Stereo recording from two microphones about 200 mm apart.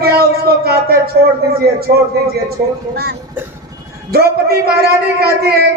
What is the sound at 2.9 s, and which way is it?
A man's voice, 50° right (ahead or behind).